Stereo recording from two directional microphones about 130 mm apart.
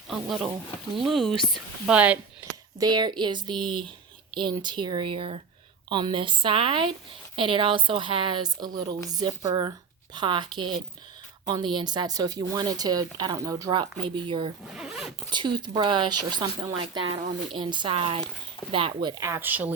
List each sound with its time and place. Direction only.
0.1 s speech: centre (ahead or behind)
1.9 s speech: 10° right (ahead or behind)
2.7 s a woman's voice: 30° right (ahead or behind)
10.2 s a woman's voice: 35° right (ahead or behind)
14.7 s speech: 5° right (ahead or behind)
15.3 s a woman's voice: 35° right (ahead or behind)
16.8 s a woman's voice: 45° right (ahead or behind)
19.2 s speech: 20° right (ahead or behind)